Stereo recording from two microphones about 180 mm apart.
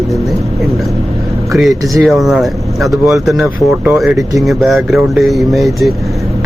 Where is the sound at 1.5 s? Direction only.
Centre (ahead or behind).